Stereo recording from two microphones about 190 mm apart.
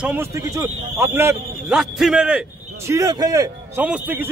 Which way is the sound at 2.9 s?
15° right (ahead or behind).